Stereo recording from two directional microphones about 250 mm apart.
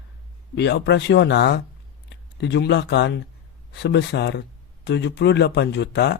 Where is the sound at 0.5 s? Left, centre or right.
Left.